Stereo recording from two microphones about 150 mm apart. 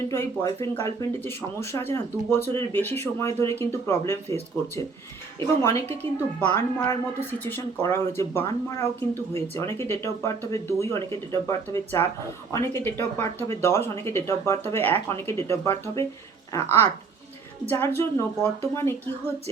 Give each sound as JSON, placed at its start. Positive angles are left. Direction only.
{"t": 0.1, "sound": "speech", "side_deg": 20}
{"t": 6.5, "sound": "speech", "side_deg": 15}